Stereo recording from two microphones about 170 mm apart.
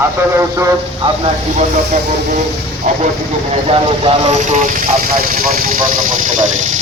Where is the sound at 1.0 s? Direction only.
30° right (ahead or behind).